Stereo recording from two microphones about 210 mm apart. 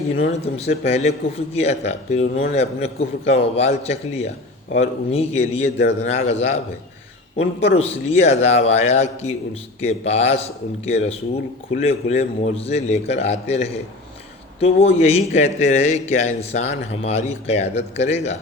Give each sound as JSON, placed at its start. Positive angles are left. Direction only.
{"t": 0.2, "sound": "a man's voice", "side_deg": 30}
{"t": 7.8, "sound": "a man's voice", "side_deg": 30}
{"t": 14.6, "sound": "a man's voice", "side_deg": 30}